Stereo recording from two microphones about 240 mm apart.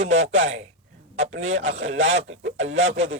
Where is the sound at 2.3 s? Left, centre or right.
Right.